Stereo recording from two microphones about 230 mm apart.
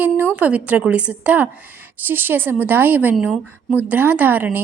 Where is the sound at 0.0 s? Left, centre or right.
Centre.